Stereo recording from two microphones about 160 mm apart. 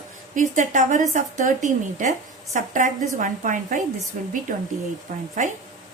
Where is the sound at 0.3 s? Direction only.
55° right (ahead or behind).